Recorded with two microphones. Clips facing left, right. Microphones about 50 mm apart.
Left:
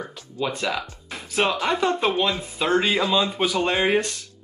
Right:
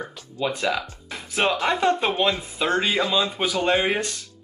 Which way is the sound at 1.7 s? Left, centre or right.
Right.